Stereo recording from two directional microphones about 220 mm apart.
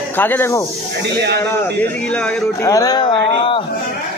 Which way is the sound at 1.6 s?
5° left (ahead or behind).